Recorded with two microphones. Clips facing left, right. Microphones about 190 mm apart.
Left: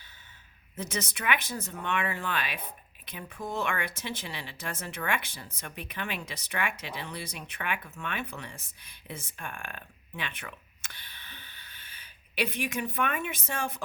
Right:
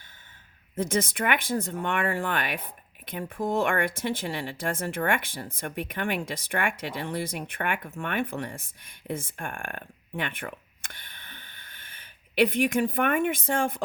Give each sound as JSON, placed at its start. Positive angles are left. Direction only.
{"t": 0.8, "sound": "speech", "side_deg": -50}